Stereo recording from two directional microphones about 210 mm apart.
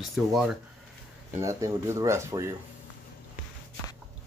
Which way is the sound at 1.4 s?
15° right (ahead or behind).